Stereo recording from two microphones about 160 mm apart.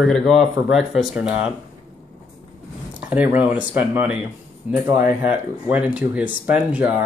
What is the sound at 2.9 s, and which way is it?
Speech, 10° right (ahead or behind).